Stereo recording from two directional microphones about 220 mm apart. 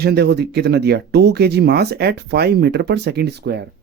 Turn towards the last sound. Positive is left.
turn(degrees=-50)  # may be behind; listen again after turning